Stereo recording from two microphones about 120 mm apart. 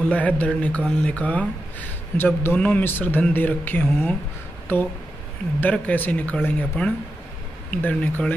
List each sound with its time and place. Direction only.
0.1 s speech: 10° left (ahead or behind)